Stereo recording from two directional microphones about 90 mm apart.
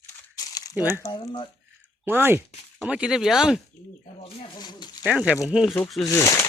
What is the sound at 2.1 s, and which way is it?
Speech, 25° right (ahead or behind).